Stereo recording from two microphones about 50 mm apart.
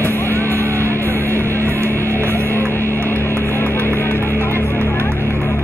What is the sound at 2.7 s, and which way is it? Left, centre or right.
Music, left.